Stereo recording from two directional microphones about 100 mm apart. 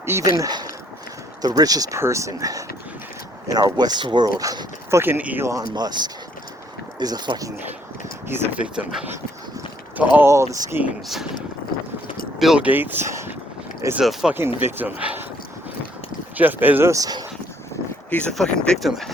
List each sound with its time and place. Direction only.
0.0 s speech: 30° right (ahead or behind)
5.5 s speech: 40° right (ahead or behind)
8.3 s speech: 15° right (ahead or behind)
10.2 s speech: 30° right (ahead or behind)
12.4 s speech: 5° right (ahead or behind)
12.6 s speech: 20° right (ahead or behind)
14.0 s speech: 5° right (ahead or behind)
14.6 s speech: 20° right (ahead or behind)
16.4 s speech: 20° right (ahead or behind)
16.9 s speech: 40° right (ahead or behind)
18.1 s speech: 10° left (ahead or behind)